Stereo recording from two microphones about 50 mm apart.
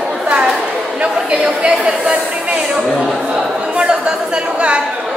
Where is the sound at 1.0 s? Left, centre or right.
Right.